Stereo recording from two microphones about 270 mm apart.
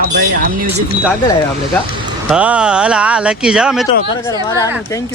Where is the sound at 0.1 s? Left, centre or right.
Right.